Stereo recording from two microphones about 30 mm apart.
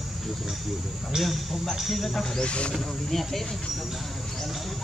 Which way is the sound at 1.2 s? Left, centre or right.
Centre.